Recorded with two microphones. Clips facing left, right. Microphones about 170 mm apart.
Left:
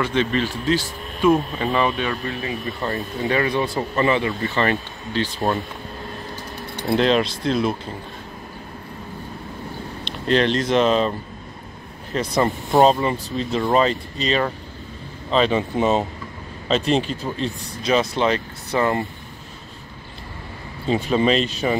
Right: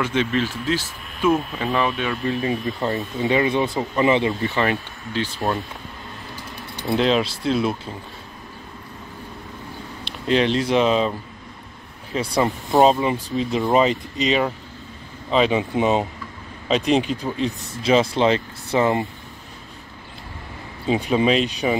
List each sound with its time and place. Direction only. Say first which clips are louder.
0.0 s speech: left 1 dB; 5° right (ahead or behind)
2.8 s speech: right 2 dB; 20° right (ahead or behind)
4.6 s speech: left 1 dB; 10° right (ahead or behind)
7.0 s speech: left 1 dB; 5° right (ahead or behind)
10.0 s speech: even; 5° right (ahead or behind)
17.8 s speech: right 2 dB; 25° right (ahead or behind)
20.9 s speech: even; 10° right (ahead or behind)